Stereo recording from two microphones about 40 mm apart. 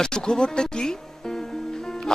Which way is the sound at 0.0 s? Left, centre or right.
Centre.